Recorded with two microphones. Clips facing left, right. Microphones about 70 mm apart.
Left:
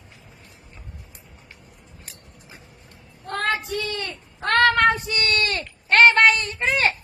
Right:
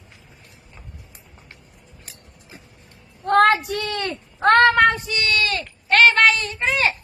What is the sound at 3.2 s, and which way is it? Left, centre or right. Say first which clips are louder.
Child singing: right 10 dB; right.